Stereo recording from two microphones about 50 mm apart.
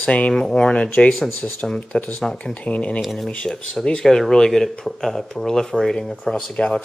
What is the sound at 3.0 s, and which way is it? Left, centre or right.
Speech, centre.